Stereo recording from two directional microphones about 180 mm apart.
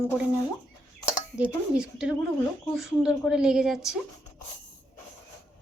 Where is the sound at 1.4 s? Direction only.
5° right (ahead or behind).